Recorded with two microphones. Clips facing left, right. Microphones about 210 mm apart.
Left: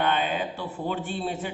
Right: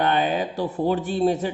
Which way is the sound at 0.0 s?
40° right (ahead or behind).